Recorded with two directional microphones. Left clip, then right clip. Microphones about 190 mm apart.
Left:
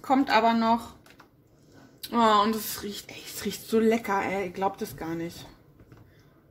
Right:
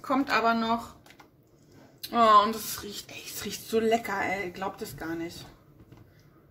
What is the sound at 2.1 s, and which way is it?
Speech, 20° left (ahead or behind).